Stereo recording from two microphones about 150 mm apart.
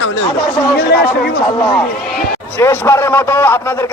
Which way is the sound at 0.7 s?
90° left.